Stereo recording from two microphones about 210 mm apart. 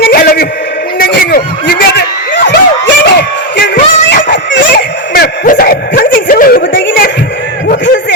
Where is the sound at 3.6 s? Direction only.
45° left (ahead or behind).